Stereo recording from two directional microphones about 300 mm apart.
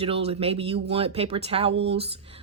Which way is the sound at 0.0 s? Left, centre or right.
Centre.